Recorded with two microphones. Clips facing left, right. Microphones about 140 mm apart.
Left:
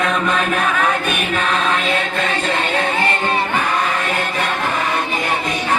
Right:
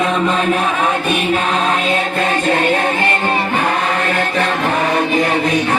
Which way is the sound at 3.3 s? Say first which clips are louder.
Right 2 dB; 60° right (ahead or behind).